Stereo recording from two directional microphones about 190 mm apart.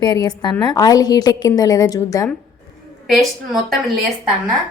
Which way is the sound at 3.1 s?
Centre (ahead or behind).